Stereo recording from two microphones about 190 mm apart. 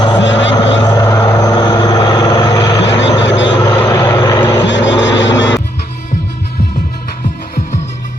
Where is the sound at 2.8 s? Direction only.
70° left (ahead or behind).